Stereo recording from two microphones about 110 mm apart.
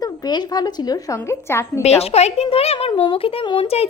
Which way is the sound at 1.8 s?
70° left (ahead or behind).